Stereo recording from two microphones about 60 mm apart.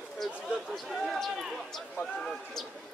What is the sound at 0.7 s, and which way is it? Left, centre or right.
A man's voice, centre.